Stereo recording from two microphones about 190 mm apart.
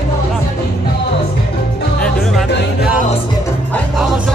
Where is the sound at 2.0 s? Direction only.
Centre (ahead or behind).